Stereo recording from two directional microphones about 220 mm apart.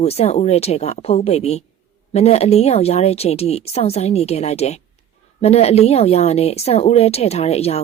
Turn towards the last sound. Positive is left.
turn(degrees=30)  # may be behind; listen again after turning